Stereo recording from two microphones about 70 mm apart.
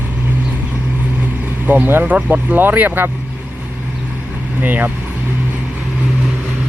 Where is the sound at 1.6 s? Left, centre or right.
Right.